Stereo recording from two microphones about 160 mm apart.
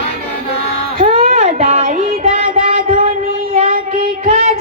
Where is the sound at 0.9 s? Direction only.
60° right (ahead or behind).